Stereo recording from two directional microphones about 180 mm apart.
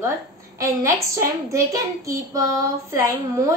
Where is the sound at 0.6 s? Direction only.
15° right (ahead or behind).